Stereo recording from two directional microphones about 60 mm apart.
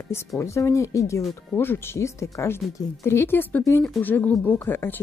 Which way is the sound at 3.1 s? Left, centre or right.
Left.